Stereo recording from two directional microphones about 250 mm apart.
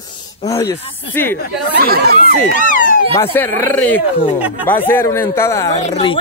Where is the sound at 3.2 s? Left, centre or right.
Centre.